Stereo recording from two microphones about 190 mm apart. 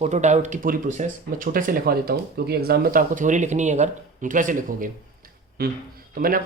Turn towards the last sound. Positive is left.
turn(degrees=-50)  # may be behind; listen again after turning